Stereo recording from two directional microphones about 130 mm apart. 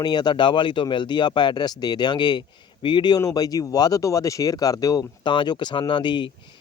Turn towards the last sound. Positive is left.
turn(degrees=35)  # may be behind; listen again after turning